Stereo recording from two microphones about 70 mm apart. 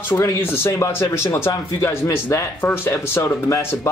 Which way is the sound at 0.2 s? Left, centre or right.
Left.